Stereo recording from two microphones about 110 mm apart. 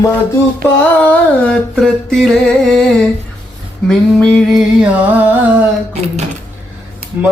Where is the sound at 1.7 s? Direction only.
5° left (ahead or behind).